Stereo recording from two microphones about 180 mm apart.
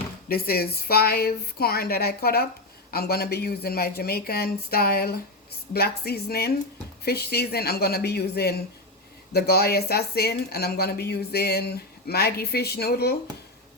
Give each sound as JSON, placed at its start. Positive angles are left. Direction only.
{"t": 0.3, "sound": "speech", "side_deg": 60}